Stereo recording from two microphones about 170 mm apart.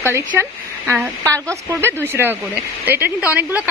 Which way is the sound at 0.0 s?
15° right (ahead or behind).